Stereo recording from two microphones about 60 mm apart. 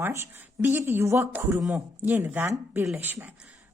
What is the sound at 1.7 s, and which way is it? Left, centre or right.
A woman's voice, right.